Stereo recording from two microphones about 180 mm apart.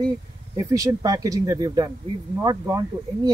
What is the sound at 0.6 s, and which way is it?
Speech, 20° right (ahead or behind).